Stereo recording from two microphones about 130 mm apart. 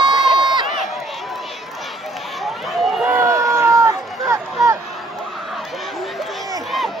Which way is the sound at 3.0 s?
20° right (ahead or behind).